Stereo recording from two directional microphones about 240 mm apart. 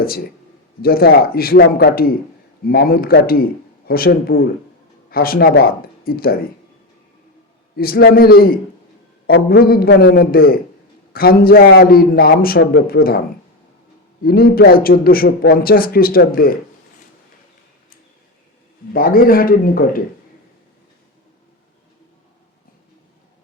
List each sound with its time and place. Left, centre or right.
0.8 s a man's voice: left
7.8 s a man's voice: left
14.3 s a man's voice: left
18.9 s a man's voice: left